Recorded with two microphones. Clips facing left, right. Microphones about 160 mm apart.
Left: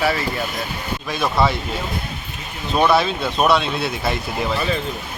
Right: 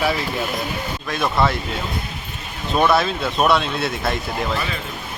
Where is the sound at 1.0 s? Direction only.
Centre (ahead or behind).